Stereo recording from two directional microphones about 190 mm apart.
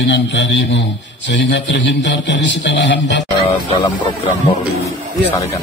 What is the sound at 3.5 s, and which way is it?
Speech, 25° left (ahead or behind).